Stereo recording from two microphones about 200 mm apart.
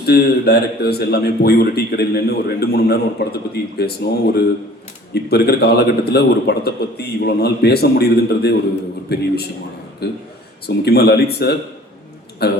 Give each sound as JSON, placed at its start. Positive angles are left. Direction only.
{"t": 0.0, "sound": "a man's voice", "side_deg": 55}
{"t": 5.1, "sound": "a man's voice", "side_deg": 55}